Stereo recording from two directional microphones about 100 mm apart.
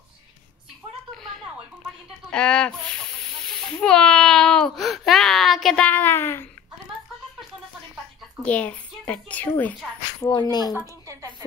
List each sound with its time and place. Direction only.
1.1 s a sound: centre (ahead or behind)
2.3 s speech: 10° left (ahead or behind)
5.9 s a woman's voice: 20° left (ahead or behind)
8.5 s a woman's voice: 15° left (ahead or behind)
10.3 s speech: 45° left (ahead or behind)